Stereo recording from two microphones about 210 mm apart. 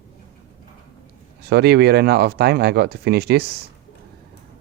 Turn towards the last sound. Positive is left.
turn(degrees=-50)  # may be behind; listen again after turning